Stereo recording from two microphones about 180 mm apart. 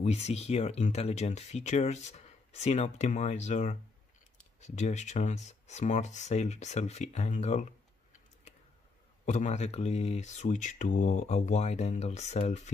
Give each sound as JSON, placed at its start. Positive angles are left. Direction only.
{"t": 0.0, "sound": "speech", "side_deg": 35}
{"t": 9.2, "sound": "speech", "side_deg": 40}